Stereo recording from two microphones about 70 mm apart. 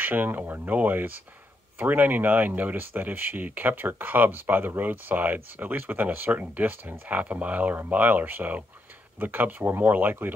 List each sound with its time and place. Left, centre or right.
0.0 s speech: right